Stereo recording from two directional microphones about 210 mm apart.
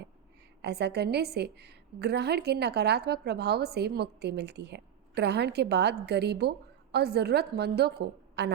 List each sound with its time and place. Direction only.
0.6 s a woman's voice: 50° right (ahead or behind)